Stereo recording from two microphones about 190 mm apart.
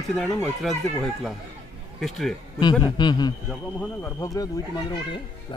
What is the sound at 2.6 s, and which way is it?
Speech, 25° left (ahead or behind).